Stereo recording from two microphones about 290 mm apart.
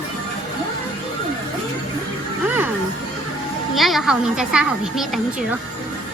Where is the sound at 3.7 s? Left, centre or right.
Centre.